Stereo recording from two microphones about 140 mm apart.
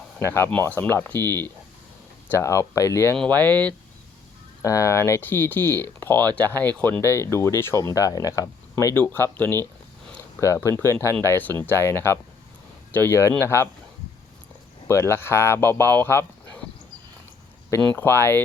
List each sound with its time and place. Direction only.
0.2 s speech: 20° left (ahead or behind)
4.6 s speech: 20° left (ahead or behind)
14.8 s speech: 20° left (ahead or behind)
17.9 s speech: 15° left (ahead or behind)